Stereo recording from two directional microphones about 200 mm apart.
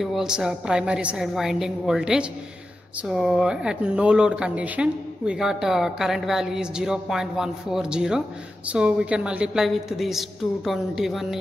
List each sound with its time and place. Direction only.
0.0 s speech: centre (ahead or behind)